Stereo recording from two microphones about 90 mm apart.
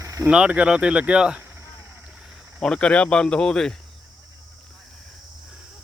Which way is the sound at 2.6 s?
10° left (ahead or behind).